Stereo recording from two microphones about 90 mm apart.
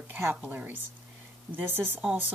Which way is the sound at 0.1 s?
20° right (ahead or behind).